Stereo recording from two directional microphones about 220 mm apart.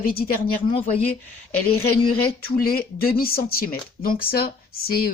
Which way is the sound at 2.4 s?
45° left (ahead or behind).